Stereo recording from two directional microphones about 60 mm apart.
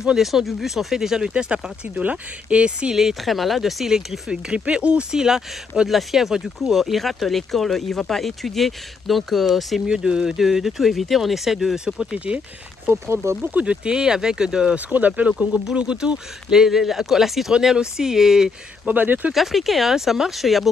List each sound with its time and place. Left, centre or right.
0.0 s speech: centre
1.3 s speech: centre
3.0 s speech: centre
9.8 s speech: centre
12.9 s speech: right
13.4 s speech: right
13.8 s speech: centre
14.9 s speech: right; by 18.5 s centre
18.9 s speech: right
19.3 s speech: centre